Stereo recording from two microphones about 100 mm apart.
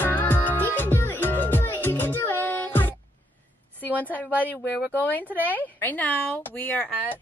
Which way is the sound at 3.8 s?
15° left (ahead or behind).